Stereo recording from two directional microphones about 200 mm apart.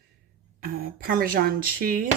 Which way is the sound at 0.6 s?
45° right (ahead or behind).